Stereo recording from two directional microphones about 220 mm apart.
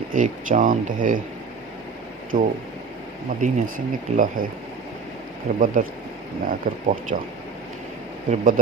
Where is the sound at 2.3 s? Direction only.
35° right (ahead or behind).